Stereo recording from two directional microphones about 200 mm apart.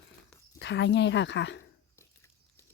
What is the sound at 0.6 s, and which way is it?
Speech, 60° left (ahead or behind).